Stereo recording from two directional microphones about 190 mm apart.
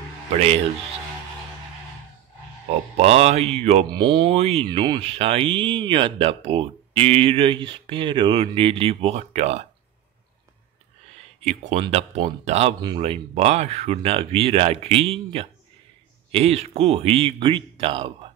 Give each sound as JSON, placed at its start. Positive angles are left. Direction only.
{"t": 0.3, "sound": "speech", "side_deg": -35}
{"t": 2.7, "sound": "speech", "side_deg": -30}
{"t": 11.4, "sound": "speech", "side_deg": -35}